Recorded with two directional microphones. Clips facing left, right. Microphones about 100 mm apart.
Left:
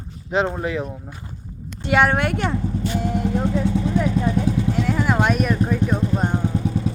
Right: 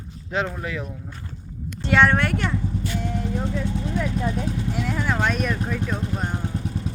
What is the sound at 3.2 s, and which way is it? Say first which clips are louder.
Vehicle: left 7 dB; 75° left (ahead or behind).